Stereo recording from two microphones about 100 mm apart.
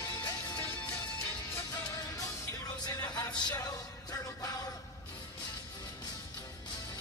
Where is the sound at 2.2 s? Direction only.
35° left (ahead or behind).